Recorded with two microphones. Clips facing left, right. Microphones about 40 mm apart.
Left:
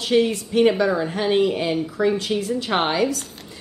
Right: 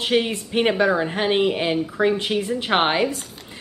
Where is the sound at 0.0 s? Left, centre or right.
Right.